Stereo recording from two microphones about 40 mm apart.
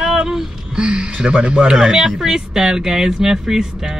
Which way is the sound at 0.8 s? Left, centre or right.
Right.